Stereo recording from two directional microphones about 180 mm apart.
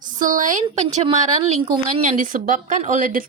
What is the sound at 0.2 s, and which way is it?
A woman's voice, 45° right (ahead or behind).